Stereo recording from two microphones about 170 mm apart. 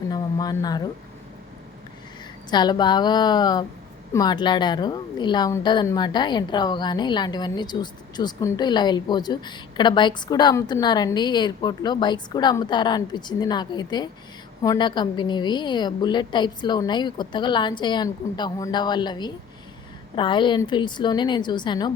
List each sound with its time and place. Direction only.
0.1 s speech: 20° left (ahead or behind)
2.5 s a woman's voice: 25° left (ahead or behind)